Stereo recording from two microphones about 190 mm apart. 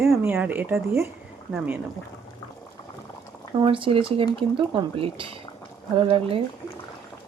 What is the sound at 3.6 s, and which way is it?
Speech, 30° right (ahead or behind).